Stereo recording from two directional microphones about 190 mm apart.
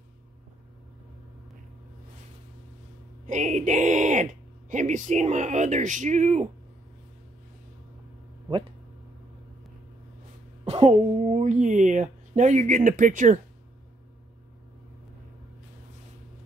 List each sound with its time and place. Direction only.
3.3 s speech: 40° right (ahead or behind)
10.6 s a woman's voice: 30° right (ahead or behind)